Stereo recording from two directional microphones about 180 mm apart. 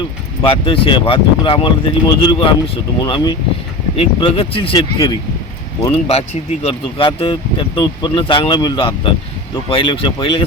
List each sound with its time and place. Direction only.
0.4 s speech: 30° left (ahead or behind)